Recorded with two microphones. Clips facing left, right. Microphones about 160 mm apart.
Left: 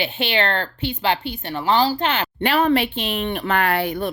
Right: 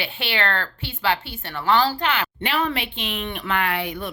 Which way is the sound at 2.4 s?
45° left (ahead or behind).